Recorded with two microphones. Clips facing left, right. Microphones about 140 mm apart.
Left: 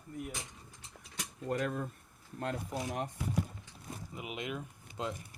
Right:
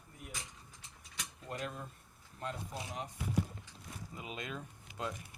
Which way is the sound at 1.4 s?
50° left (ahead or behind).